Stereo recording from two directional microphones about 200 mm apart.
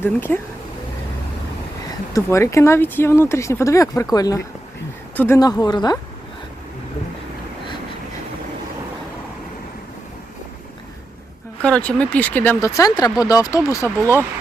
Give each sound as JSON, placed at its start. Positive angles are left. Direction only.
{"t": 0.0, "sound": "speech", "side_deg": 10}
{"t": 2.1, "sound": "speech", "side_deg": 15}
{"t": 11.6, "sound": "speech", "side_deg": 5}